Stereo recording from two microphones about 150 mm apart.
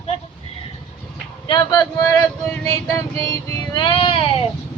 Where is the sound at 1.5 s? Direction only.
30° left (ahead or behind).